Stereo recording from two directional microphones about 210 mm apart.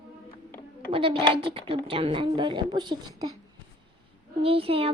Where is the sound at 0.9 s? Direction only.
25° right (ahead or behind).